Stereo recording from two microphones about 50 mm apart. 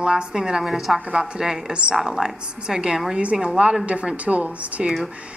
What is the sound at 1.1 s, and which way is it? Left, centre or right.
A woman's voice, centre.